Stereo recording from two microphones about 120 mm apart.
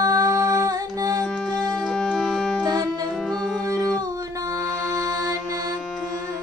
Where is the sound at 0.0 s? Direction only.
30° right (ahead or behind).